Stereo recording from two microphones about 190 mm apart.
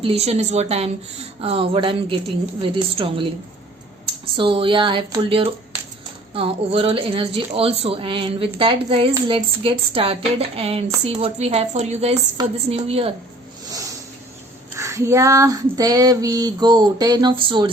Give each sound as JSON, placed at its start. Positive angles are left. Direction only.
{"t": 0.0, "sound": "speech", "side_deg": -30}
{"t": 1.4, "sound": "female singing", "side_deg": -30}
{"t": 4.4, "sound": "female singing", "side_deg": -25}
{"t": 9.1, "sound": "speech", "side_deg": -25}
{"t": 14.8, "sound": "female singing", "side_deg": -15}